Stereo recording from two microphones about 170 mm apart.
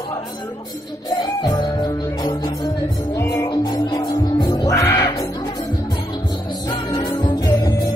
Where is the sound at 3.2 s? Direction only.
20° left (ahead or behind).